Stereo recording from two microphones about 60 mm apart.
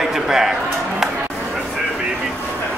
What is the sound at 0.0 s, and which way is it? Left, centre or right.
Music, centre.